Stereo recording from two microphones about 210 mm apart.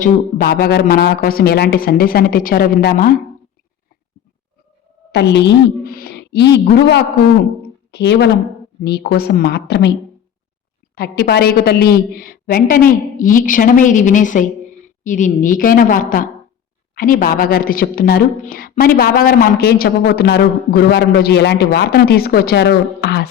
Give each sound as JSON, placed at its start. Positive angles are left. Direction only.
{"t": 0.0, "sound": "a woman's voice", "side_deg": 45}
{"t": 5.1, "sound": "a woman's voice", "side_deg": 55}
{"t": 10.9, "sound": "a woman's voice", "side_deg": 50}